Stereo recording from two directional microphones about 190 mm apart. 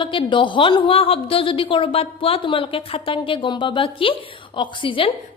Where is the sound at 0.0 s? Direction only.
25° left (ahead or behind).